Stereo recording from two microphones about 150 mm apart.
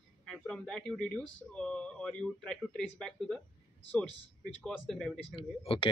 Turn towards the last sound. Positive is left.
turn(degrees=35)  # may be behind; listen again after turning